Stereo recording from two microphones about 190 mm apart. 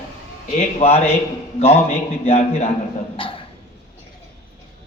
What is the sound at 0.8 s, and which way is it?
Speech, 30° left (ahead or behind).